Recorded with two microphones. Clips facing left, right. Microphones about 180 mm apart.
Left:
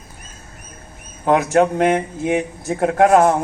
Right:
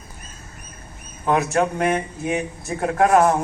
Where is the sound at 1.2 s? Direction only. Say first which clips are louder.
Left 5 dB; 70° left (ahead or behind).